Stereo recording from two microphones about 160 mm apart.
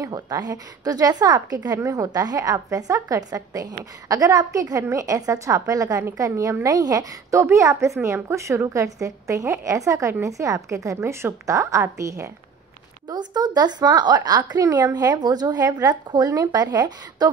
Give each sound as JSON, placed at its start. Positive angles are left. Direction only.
{"t": 0.0, "sound": "a woman's voice", "side_deg": -25}